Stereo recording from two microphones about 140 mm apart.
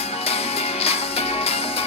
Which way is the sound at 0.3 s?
45° left (ahead or behind).